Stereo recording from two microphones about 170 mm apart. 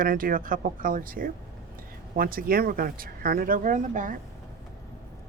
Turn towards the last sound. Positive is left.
turn(degrees=-50)  # may be behind; listen again after turning